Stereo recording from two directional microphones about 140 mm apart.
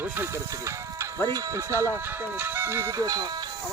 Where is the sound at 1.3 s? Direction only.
20° right (ahead or behind).